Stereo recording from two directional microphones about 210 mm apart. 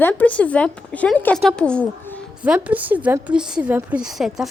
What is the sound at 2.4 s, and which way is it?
A woman's voice, 5° right (ahead or behind).